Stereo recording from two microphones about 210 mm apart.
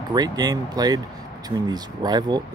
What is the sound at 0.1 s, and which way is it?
Speech, 20° right (ahead or behind).